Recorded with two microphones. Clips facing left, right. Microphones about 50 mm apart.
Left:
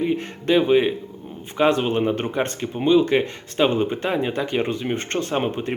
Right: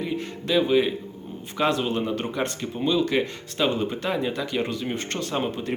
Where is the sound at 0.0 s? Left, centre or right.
Left.